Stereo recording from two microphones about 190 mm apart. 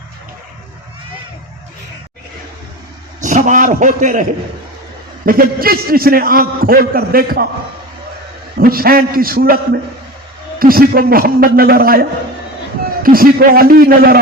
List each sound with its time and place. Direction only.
3.2 s a man's voice: 40° right (ahead or behind)
8.5 s a man's voice: 50° right (ahead or behind)
10.6 s a man's voice: 50° right (ahead or behind)